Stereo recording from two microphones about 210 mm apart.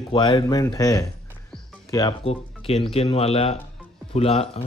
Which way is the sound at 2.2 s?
25° left (ahead or behind).